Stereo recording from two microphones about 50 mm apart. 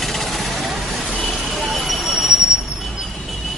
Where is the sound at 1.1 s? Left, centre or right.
Centre.